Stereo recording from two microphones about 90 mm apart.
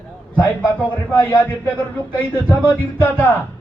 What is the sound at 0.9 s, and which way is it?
Speech, 25° left (ahead or behind).